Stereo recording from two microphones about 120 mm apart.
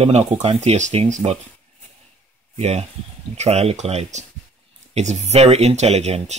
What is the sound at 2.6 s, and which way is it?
Speech, 60° right (ahead or behind).